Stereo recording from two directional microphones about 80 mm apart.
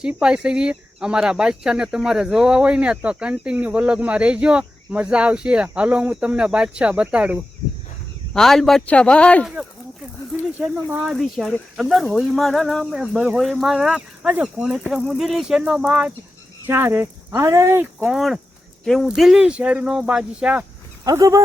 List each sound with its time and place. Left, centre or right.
0.0 s speech: centre
8.3 s speech: centre
11.0 s speech: centre
12.8 s speech: centre
16.6 s speech: right
18.0 s speech: centre
21.0 s speech: right